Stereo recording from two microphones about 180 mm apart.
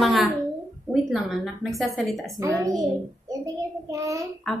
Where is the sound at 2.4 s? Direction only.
20° right (ahead or behind).